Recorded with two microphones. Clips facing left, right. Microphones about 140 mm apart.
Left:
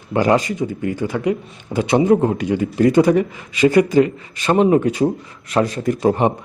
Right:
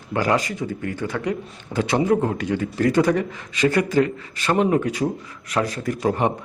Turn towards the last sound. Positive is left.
turn(degrees=25)  # may be behind; listen again after turning